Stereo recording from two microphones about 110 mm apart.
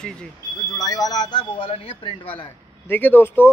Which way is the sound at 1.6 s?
55° left (ahead or behind).